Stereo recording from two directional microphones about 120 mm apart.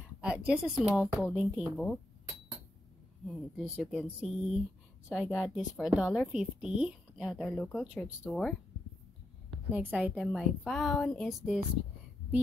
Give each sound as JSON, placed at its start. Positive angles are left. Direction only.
{"t": 0.2, "sound": "a woman's voice", "side_deg": -10}
{"t": 1.8, "sound": "chink", "side_deg": 0}
{"t": 3.5, "sound": "a woman's voice", "side_deg": -5}
{"t": 7.4, "sound": "speech", "side_deg": 10}
{"t": 7.8, "sound": "a woman's voice", "side_deg": -5}
{"t": 8.2, "sound": "speech", "side_deg": 10}
{"t": 9.7, "sound": "a woman's voice", "side_deg": -15}